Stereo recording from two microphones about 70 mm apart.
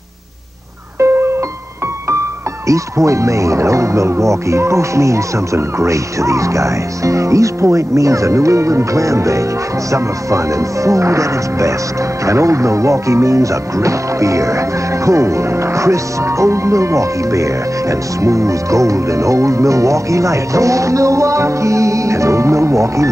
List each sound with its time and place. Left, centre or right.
0.9 s music: right
2.7 s speech: right